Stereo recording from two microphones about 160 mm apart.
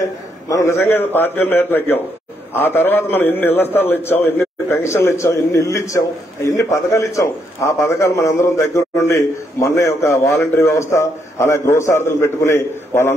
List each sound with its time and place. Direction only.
0.5 s a man's voice: 20° left (ahead or behind)